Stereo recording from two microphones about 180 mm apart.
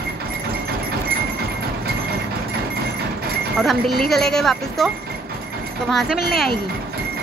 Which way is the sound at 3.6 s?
Centre (ahead or behind).